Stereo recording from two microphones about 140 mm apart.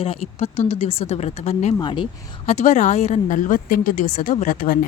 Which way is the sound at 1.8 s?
35° left (ahead or behind).